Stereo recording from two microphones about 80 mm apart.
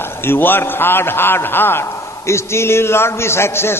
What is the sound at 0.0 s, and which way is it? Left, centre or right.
A man's voice, left.